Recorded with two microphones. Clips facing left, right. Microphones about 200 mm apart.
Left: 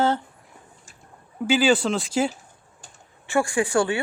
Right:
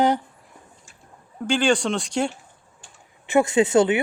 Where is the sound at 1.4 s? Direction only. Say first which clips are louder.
Left 1 dB; 5° left (ahead or behind).